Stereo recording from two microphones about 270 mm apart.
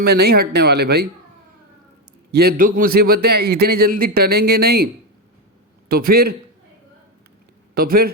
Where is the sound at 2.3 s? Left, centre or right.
Right.